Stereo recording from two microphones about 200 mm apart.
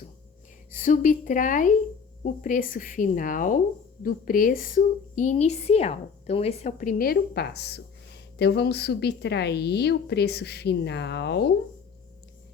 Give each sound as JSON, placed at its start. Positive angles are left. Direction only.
{"t": 0.7, "sound": "a woman's voice", "side_deg": 40}